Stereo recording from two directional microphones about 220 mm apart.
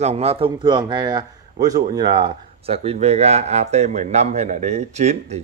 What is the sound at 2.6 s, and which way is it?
A man's voice, 25° right (ahead or behind).